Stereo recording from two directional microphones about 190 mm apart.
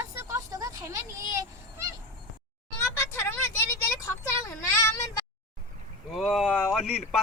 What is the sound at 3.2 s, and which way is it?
A woman's voice, 10° left (ahead or behind).